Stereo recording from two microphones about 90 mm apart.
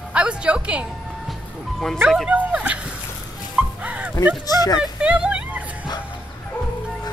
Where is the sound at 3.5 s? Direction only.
15° right (ahead or behind).